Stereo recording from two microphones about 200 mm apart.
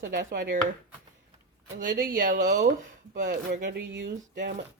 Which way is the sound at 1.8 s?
45° right (ahead or behind).